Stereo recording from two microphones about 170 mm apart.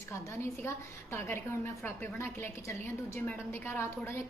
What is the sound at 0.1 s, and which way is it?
A woman's voice, 15° left (ahead or behind).